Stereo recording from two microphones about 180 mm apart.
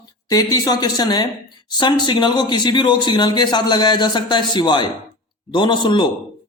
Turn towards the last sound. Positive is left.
turn(degrees=25)  # may be behind; listen again after turning